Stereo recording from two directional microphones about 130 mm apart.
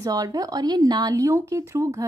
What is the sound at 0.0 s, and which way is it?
Speech, 30° right (ahead or behind).